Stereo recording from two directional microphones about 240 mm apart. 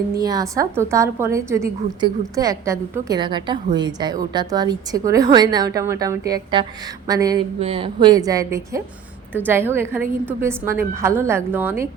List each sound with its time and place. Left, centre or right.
0.2 s a woman's voice: centre